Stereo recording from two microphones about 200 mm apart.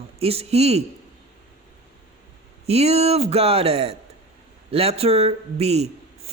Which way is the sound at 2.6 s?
30° right (ahead or behind).